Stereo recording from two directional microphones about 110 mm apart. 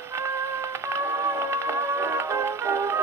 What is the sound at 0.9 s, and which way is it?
Music, 25° right (ahead or behind).